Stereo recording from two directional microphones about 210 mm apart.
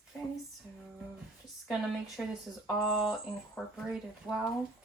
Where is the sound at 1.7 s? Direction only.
Centre (ahead or behind).